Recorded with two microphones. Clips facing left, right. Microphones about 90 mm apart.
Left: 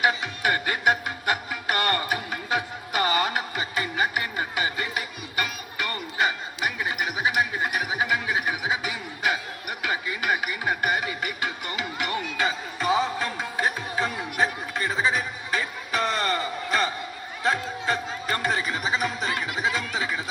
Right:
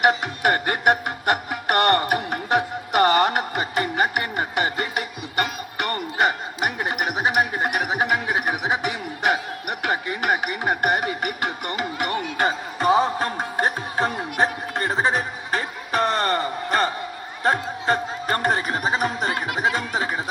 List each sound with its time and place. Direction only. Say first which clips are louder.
0.0 s music: right 5 dB; 50° right (ahead or behind)
14.3 s a sound: right 2 dB; 60° right (ahead or behind)
20.0 s music: right 3 dB; 50° right (ahead or behind)